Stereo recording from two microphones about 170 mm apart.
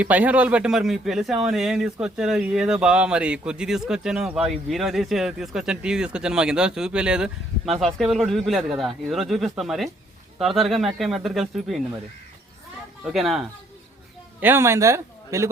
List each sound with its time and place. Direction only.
0.0 s speech: 10° right (ahead or behind)
13.1 s speech: centre (ahead or behind)
14.4 s speech: 15° right (ahead or behind)